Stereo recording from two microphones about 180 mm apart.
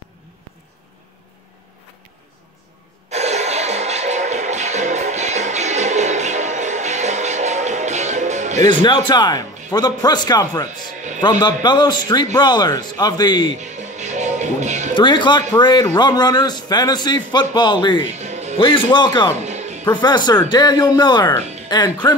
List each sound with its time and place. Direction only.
3.1 s music: 35° right (ahead or behind)
8.6 s a man's voice: 25° left (ahead or behind)
13.6 s music: 40° right (ahead or behind)
15.0 s a man's voice: 25° left (ahead or behind)
18.0 s music: 40° right (ahead or behind)
18.6 s a man's voice: 30° left (ahead or behind)
19.4 s music: 40° right (ahead or behind)
19.9 s a man's voice: 25° left (ahead or behind)